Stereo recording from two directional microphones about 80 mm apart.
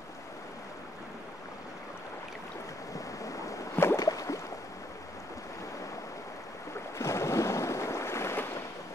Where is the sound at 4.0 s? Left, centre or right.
Left.